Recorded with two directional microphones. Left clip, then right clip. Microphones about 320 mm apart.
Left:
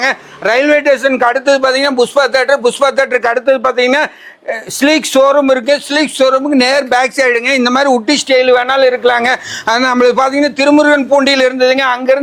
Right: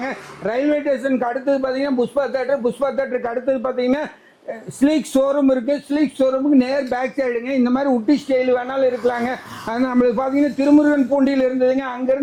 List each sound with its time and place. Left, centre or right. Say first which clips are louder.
0.0 s a man's voice: left 12 dB; centre